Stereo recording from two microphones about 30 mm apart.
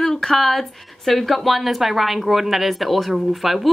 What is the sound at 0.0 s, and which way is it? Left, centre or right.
Speech, centre.